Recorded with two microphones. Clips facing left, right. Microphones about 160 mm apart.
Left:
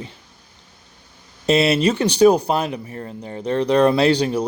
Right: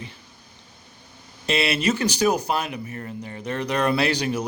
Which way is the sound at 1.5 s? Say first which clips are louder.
Left 6 dB; 35° left (ahead or behind).